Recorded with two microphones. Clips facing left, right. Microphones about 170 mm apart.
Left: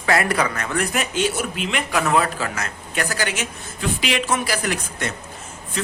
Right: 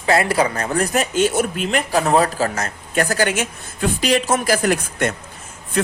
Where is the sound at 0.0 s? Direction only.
25° right (ahead or behind).